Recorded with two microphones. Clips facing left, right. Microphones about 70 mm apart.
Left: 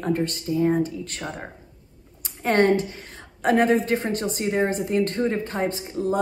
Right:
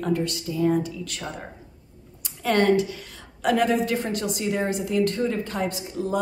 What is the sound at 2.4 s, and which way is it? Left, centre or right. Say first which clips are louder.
A woman's voice: left 1 dB; left.